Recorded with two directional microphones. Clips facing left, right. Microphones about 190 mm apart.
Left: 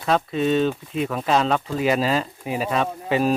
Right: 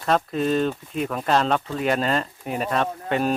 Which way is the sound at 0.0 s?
Centre (ahead or behind).